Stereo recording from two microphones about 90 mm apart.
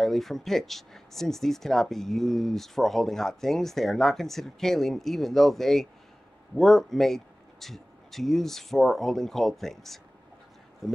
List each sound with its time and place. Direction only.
0.0 s speech: centre (ahead or behind)